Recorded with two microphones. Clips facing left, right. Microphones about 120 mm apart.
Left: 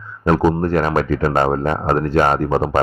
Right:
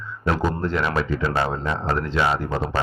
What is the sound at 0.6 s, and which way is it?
Speech, 50° left (ahead or behind).